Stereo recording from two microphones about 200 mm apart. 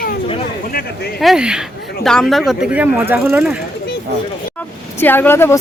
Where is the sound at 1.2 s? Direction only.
Centre (ahead or behind).